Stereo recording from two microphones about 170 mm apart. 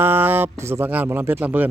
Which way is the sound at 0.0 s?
10° right (ahead or behind).